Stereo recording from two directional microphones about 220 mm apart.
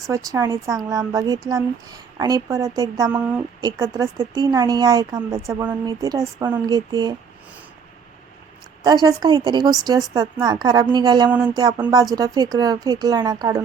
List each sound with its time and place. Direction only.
0.1 s speech: 15° right (ahead or behind)
8.8 s a woman's voice: 20° right (ahead or behind)